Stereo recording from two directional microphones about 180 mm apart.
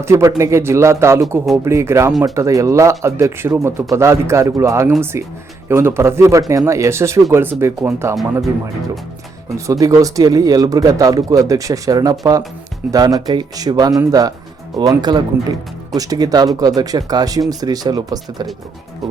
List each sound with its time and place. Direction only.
0.0 s speech: 15° right (ahead or behind)
9.6 s speech: 15° right (ahead or behind)